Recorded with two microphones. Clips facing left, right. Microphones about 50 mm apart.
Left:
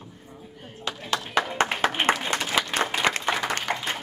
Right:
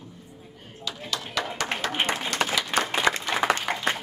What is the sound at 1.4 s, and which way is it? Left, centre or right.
Clapping, left.